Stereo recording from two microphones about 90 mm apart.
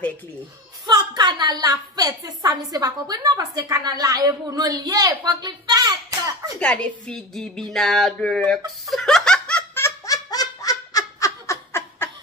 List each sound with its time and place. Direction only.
0.8 s a woman's voice: 50° right (ahead or behind)
6.6 s a woman's voice: 10° left (ahead or behind)
10.0 s laughter: 40° left (ahead or behind)